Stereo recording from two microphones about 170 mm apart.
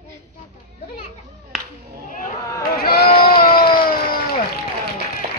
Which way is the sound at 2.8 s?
60° left (ahead or behind).